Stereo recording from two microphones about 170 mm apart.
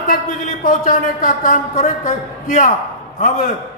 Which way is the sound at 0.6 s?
50° left (ahead or behind).